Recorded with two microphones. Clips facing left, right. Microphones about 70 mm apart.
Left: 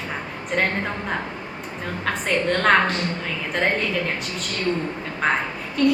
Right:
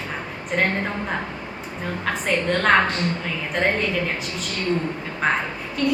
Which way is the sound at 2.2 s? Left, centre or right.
Centre.